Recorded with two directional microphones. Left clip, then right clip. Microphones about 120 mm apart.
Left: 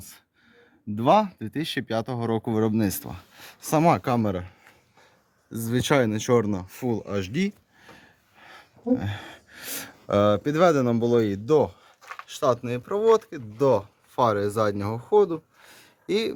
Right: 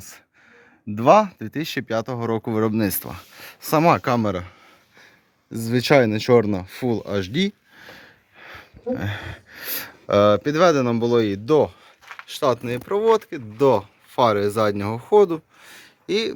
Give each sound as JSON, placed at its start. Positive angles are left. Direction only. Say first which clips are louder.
{"t": 0.9, "sound": "speech", "louder": "right 5 dB", "side_deg": -30}
{"t": 3.9, "sound": "speech", "louder": "right 4 dB", "side_deg": -25}
{"t": 4.3, "sound": "speech", "louder": "right 4 dB", "side_deg": -45}
{"t": 5.5, "sound": "speech", "louder": "right 6 dB", "side_deg": -65}
{"t": 7.8, "sound": "a sound", "louder": "right 7 dB", "side_deg": -30}
{"t": 9.5, "sound": "speech", "louder": "right 3 dB", "side_deg": -10}
{"t": 14.2, "sound": "speech", "louder": "right 4 dB", "side_deg": -20}
{"t": 15.6, "sound": "a sound", "louder": "right 3 dB", "side_deg": 0}